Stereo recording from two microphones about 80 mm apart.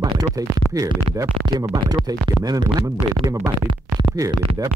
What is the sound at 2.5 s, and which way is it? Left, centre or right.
Speech, right.